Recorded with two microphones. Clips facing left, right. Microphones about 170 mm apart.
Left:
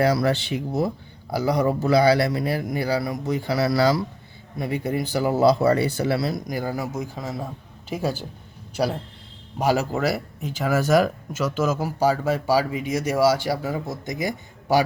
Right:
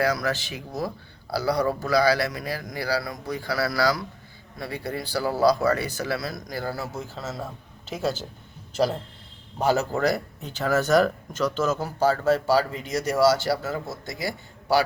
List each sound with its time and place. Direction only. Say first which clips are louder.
0.0 s speech: left 4 dB; 30° left (ahead or behind); by 8.3 s 15° left (ahead or behind)
9.6 s speech: left 1 dB; 10° left (ahead or behind)